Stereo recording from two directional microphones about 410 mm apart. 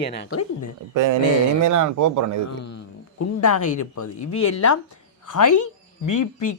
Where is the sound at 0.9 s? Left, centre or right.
Right.